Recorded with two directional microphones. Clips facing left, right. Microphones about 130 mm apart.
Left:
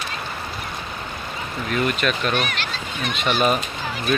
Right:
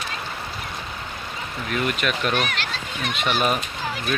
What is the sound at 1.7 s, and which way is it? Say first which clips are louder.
Speech: left 2 dB; 5° right (ahead or behind).